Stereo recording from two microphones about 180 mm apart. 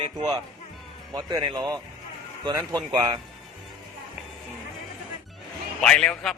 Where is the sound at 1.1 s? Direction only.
25° right (ahead or behind).